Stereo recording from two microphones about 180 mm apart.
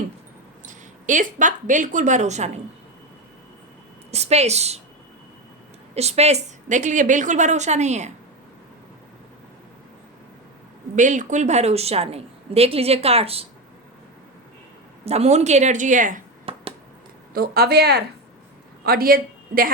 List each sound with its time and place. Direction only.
0.6 s speech: 45° right (ahead or behind)
4.1 s a woman's voice: 35° right (ahead or behind)
5.9 s a woman's voice: 35° right (ahead or behind)
10.9 s a woman's voice: 45° right (ahead or behind)
15.0 s a woman's voice: 35° right (ahead or behind)
16.5 s finger snapping: 30° right (ahead or behind)
17.3 s a woman's voice: 60° right (ahead or behind)